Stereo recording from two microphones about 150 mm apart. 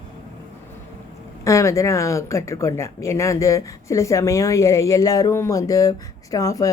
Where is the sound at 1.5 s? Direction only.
20° left (ahead or behind).